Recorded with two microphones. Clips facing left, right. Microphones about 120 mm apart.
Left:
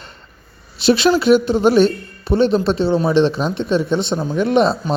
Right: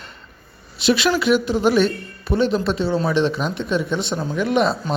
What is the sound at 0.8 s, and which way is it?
Speech, 35° left (ahead or behind).